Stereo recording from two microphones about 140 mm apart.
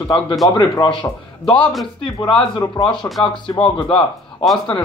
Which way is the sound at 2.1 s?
30° left (ahead or behind).